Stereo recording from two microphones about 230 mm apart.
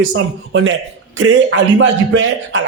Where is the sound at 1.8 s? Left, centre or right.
Right.